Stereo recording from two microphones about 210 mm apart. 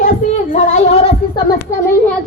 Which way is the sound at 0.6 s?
30° left (ahead or behind).